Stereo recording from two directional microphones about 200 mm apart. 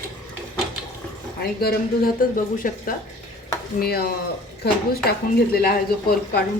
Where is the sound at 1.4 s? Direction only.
50° left (ahead or behind).